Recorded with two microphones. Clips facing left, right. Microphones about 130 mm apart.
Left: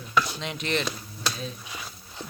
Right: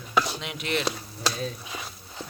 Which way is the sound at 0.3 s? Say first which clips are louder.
Left 1 dB; 5° right (ahead or behind).